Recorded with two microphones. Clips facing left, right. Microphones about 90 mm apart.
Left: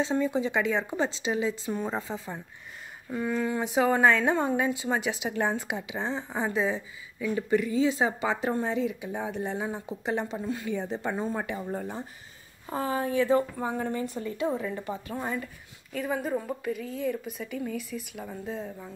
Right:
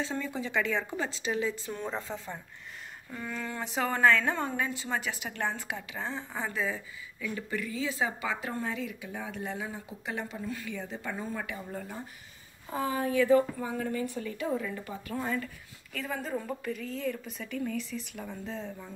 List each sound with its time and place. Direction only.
0.0 s a woman's voice: 20° left (ahead or behind)